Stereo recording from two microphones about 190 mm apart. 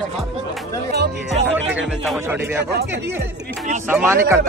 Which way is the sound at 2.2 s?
15° right (ahead or behind).